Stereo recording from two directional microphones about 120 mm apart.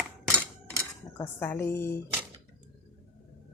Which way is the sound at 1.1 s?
20° left (ahead or behind).